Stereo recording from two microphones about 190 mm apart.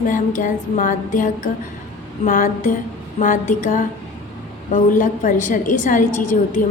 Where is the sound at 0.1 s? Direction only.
45° left (ahead or behind).